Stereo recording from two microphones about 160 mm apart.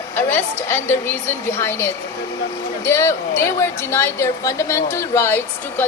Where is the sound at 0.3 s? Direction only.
15° left (ahead or behind).